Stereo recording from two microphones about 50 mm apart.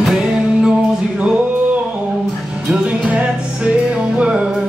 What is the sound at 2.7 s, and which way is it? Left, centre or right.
Music, right.